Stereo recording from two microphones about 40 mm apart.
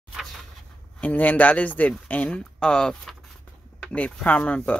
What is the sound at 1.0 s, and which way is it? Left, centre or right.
Speech, left.